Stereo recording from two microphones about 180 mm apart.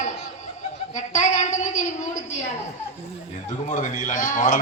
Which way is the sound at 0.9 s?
40° left (ahead or behind).